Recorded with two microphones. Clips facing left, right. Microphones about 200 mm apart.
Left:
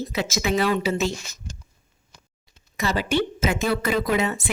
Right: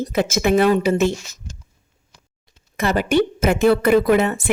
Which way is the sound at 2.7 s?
55° right (ahead or behind).